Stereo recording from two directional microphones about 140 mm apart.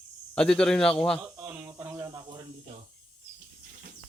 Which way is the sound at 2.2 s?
30° right (ahead or behind).